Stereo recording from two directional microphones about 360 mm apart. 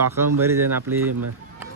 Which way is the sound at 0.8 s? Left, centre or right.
Right.